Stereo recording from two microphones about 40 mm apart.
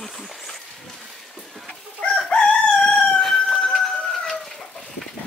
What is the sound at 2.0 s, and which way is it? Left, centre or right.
Chicken, left.